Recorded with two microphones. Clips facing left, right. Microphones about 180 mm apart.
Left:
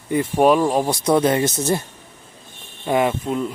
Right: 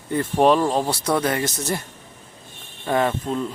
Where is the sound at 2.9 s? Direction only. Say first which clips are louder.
Left 2 dB; 10° left (ahead or behind).